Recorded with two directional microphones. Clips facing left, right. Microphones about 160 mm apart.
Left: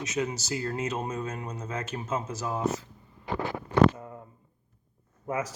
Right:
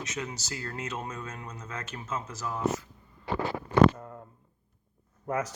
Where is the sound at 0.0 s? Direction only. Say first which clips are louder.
Left 6 dB; 20° left (ahead or behind).